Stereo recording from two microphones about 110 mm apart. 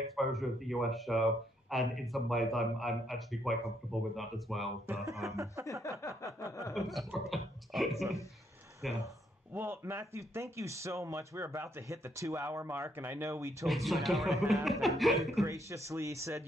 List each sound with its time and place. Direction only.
0.1 s speech: centre (ahead or behind)
4.8 s speech: 25° right (ahead or behind)
5.9 s a sound: 30° left (ahead or behind)
6.7 s speech: centre (ahead or behind)
9.5 s speech: 20° right (ahead or behind)
13.8 s speech: centre (ahead or behind)
15.4 s speech: 25° right (ahead or behind)